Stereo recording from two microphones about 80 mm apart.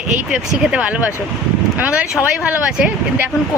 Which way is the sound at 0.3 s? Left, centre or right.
Centre.